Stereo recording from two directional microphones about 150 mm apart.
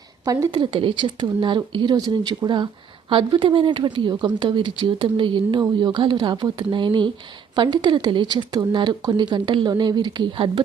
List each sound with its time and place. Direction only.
0.3 s a woman's voice: 20° right (ahead or behind)
0.6 s speech: 35° right (ahead or behind)